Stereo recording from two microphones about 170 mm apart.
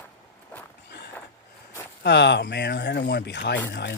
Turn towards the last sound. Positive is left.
turn(degrees=85)